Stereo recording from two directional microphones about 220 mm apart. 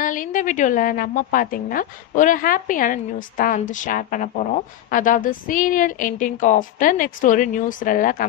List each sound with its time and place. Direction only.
0.0 s a woman's voice: 35° left (ahead or behind)